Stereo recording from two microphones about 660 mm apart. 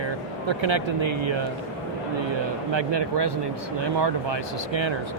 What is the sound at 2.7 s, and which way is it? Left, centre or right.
Speech, right.